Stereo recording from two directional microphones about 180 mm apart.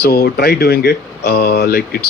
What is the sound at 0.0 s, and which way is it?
Speech, 60° left (ahead or behind).